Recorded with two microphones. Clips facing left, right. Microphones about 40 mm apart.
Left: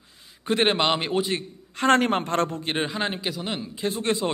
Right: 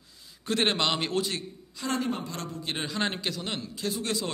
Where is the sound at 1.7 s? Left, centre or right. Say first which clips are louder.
Left 10 dB; left.